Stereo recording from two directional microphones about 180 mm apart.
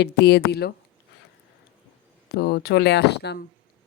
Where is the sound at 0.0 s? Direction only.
65° left (ahead or behind).